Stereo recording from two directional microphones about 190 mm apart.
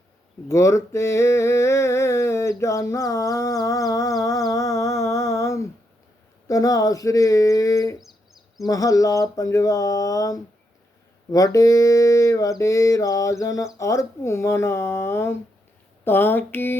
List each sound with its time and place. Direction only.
0.4 s humming: 15° left (ahead or behind)
4.5 s mantra: 15° left (ahead or behind)
6.5 s humming: 15° left (ahead or behind)
7.9 s a sound: centre (ahead or behind)
8.6 s humming: 20° left (ahead or behind)